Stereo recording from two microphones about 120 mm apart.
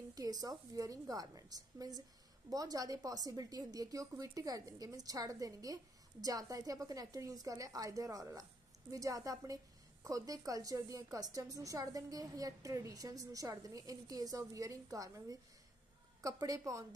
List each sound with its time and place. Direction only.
0.1 s a woman's voice: 30° right (ahead or behind)